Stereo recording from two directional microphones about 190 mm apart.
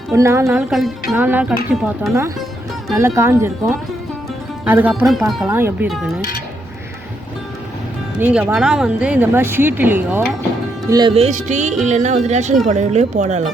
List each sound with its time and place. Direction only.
0.1 s a woman's voice: 15° right (ahead or behind)
2.9 s a woman's voice: 15° right (ahead or behind)
5.5 s a woman's voice: 10° right (ahead or behind)
8.2 s a woman's voice: 10° right (ahead or behind)
11.1 s speech: 35° right (ahead or behind)